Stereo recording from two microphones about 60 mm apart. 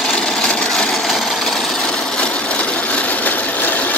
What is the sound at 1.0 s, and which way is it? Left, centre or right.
Sewing machine, centre.